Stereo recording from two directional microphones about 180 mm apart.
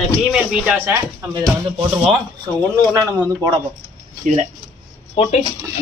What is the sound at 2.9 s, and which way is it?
Speech, 20° right (ahead or behind).